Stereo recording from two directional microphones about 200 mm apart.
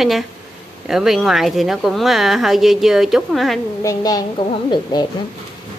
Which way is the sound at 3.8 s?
15° left (ahead or behind).